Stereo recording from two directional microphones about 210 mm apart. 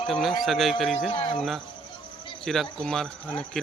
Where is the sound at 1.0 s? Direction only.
25° left (ahead or behind).